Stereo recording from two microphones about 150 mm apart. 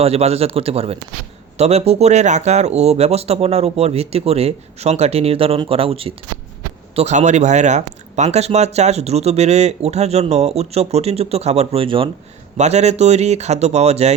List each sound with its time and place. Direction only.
0.0 s speech: 45° right (ahead or behind)
12.5 s speech: 45° right (ahead or behind)